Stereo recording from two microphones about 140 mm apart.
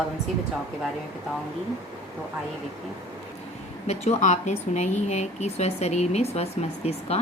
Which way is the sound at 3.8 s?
55° left (ahead or behind).